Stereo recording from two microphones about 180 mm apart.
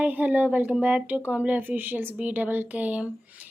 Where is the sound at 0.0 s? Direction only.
10° right (ahead or behind).